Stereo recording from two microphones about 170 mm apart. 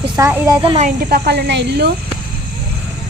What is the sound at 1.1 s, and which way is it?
Speech, 75° right (ahead or behind).